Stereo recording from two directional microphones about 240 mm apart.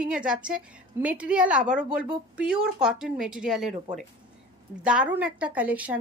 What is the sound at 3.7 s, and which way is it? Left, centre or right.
Speech, right.